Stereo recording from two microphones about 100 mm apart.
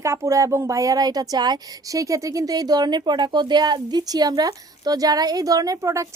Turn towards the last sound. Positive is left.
turn(degrees=-30)  # may be behind; listen again after turning